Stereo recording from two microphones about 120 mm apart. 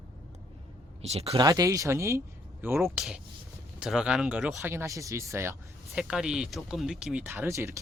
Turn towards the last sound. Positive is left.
turn(degrees=-25)  # may be behind; listen again after turning